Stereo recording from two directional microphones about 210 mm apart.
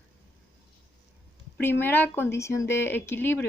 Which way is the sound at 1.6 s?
10° left (ahead or behind).